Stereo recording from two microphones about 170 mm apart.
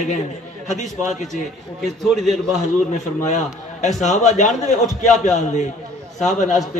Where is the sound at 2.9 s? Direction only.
45° left (ahead or behind).